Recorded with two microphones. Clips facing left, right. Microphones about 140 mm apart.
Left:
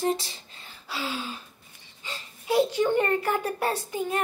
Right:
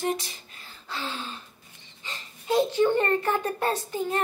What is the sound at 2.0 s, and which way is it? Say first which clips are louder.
A woman's voice: even; 10° left (ahead or behind).